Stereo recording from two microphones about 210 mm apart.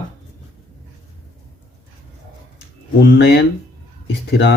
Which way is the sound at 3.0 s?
60° left (ahead or behind).